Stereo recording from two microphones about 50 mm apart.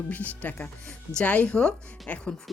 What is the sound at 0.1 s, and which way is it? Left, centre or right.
Speech, left.